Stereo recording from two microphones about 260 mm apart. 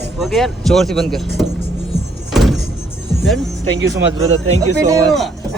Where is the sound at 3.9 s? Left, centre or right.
Centre.